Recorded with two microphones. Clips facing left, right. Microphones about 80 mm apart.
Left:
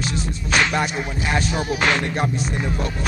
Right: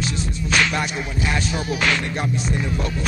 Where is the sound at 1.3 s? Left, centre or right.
Left.